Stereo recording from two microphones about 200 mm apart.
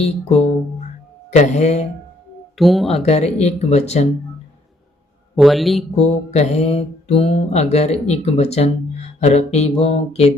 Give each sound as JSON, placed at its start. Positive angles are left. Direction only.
{"t": 0.0, "sound": "mantra", "side_deg": 30}
{"t": 2.6, "sound": "speech", "side_deg": 0}
{"t": 3.0, "sound": "mantra", "side_deg": 35}
{"t": 5.4, "sound": "speech", "side_deg": 0}
{"t": 6.0, "sound": "mantra", "side_deg": 35}